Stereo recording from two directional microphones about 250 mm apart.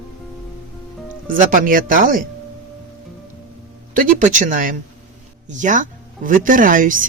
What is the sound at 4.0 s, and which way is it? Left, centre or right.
Speech, right.